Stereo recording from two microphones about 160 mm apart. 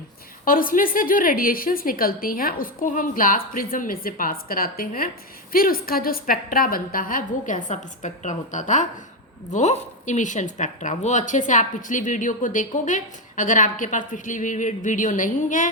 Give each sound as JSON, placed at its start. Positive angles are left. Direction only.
{"t": 0.4, "sound": "a woman's voice", "side_deg": 60}